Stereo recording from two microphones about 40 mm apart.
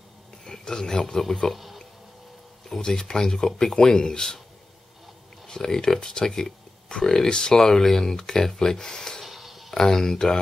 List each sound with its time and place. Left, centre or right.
0.5 s speech: centre
1.5 s music: centre
2.7 s speech: centre
5.5 s speech: centre
9.2 s a sound: centre
9.8 s speech: centre